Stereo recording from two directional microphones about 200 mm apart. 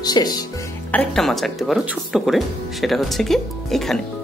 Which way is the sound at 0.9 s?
5° left (ahead or behind).